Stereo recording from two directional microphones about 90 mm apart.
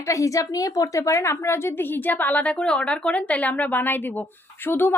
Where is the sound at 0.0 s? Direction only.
35° left (ahead or behind).